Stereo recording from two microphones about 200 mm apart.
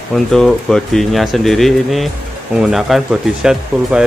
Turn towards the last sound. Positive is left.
turn(degrees=-5)  # may be behind; listen again after turning